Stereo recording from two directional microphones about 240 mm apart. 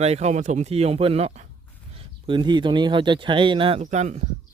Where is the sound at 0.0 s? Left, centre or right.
Right.